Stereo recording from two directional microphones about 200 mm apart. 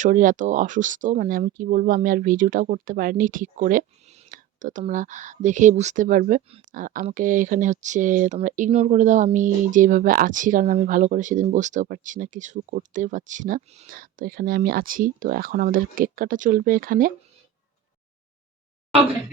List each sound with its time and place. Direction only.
0.0 s speech: 40° right (ahead or behind)